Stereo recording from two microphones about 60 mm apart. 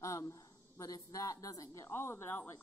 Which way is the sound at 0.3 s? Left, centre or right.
Left.